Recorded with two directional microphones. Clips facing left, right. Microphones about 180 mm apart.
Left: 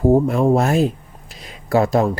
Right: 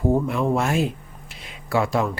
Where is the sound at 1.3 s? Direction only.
40° left (ahead or behind).